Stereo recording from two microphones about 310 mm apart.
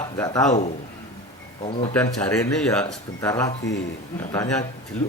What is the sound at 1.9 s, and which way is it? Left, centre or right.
Speech, centre.